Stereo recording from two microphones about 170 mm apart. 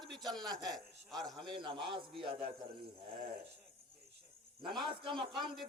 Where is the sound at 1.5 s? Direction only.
30° right (ahead or behind).